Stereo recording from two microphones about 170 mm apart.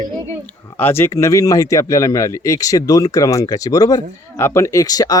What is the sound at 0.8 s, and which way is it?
Speech, 15° left (ahead or behind).